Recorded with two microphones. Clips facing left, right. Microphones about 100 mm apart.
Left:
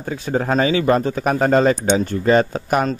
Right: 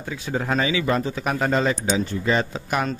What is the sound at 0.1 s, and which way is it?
A man's voice, 40° left (ahead or behind).